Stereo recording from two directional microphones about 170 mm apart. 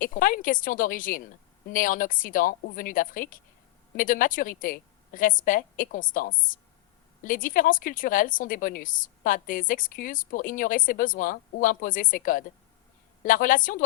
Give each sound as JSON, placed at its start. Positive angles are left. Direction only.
{"t": 0.0, "sound": "a woman's voice", "side_deg": 55}